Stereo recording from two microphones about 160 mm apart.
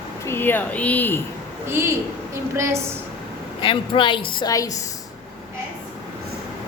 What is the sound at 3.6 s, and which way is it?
A woman's voice, 30° left (ahead or behind).